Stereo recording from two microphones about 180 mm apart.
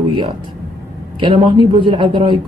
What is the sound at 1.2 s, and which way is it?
Speech, 25° right (ahead or behind).